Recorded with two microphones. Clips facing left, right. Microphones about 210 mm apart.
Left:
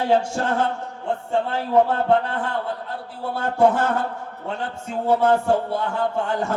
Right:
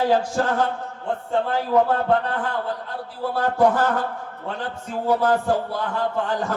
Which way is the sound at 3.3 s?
25° left (ahead or behind).